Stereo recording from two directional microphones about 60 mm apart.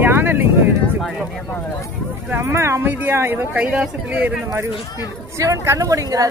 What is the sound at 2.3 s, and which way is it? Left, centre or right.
Speech, right.